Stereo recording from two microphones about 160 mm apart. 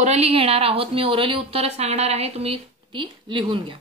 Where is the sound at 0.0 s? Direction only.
40° right (ahead or behind).